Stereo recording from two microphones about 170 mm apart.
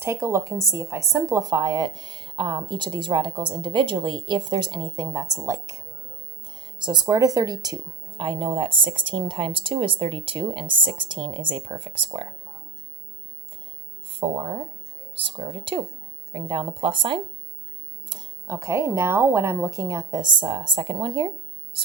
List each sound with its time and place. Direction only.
0.0 s speech: 15° right (ahead or behind)
14.1 s speech: 30° right (ahead or behind)
18.1 s speech: 15° right (ahead or behind)